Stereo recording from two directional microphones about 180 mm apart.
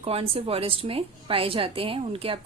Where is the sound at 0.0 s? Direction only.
30° right (ahead or behind).